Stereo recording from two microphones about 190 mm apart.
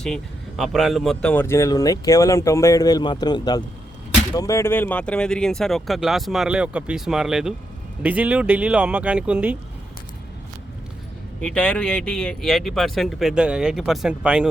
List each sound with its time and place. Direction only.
0.0 s speech: centre (ahead or behind)
11.3 s speech: 5° left (ahead or behind)